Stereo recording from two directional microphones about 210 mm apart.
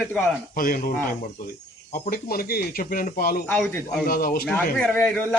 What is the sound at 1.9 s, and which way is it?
Speech, 45° left (ahead or behind).